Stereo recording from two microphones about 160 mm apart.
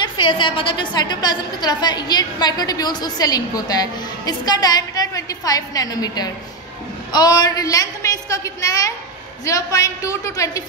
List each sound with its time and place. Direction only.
0.2 s a woman's voice: 30° left (ahead or behind)